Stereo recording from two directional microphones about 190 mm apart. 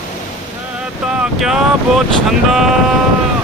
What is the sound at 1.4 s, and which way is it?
Speech, centre (ahead or behind).